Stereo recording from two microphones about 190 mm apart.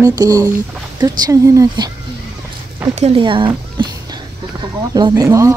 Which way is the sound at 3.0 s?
25° right (ahead or behind).